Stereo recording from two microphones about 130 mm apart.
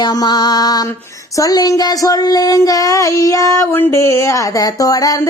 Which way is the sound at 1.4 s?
30° left (ahead or behind).